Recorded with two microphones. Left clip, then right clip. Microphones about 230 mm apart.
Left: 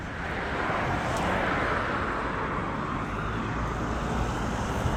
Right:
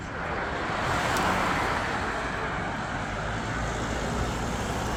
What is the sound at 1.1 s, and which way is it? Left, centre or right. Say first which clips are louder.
Vehicle: right 2 dB; right.